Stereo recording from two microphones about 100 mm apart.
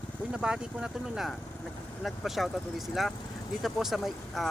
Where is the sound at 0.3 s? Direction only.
10° right (ahead or behind).